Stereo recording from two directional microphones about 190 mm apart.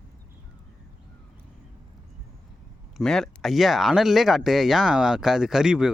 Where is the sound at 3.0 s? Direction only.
Centre (ahead or behind).